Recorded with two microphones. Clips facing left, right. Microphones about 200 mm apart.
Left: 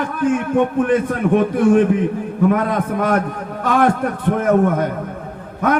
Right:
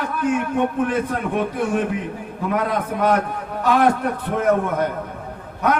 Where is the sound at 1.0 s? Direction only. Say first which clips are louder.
Left 6 dB; 50° left (ahead or behind).